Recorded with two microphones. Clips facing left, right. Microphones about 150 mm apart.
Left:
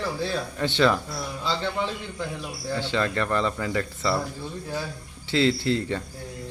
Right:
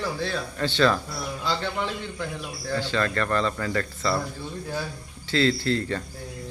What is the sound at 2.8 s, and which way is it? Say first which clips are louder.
Speech: even; 20° left (ahead or behind).